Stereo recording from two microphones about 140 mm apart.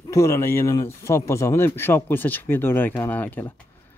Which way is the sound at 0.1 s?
20° left (ahead or behind).